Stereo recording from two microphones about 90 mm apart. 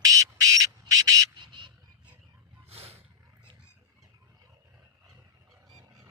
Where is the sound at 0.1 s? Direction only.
40° right (ahead or behind).